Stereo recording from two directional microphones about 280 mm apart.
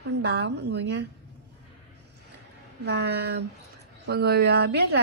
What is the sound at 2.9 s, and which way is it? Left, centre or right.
Speech, right.